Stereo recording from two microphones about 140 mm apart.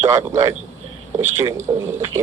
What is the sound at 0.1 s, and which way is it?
A man's voice, 25° right (ahead or behind).